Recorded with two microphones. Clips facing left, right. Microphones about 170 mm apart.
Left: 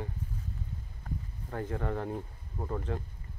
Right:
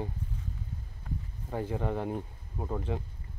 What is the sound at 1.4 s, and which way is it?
Speech, 15° right (ahead or behind).